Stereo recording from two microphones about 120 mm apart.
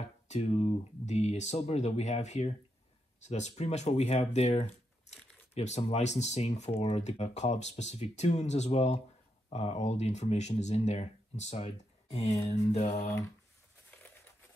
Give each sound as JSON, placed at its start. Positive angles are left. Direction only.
{"t": 0.3, "sound": "speech", "side_deg": 60}
{"t": 12.7, "sound": "speech", "side_deg": 80}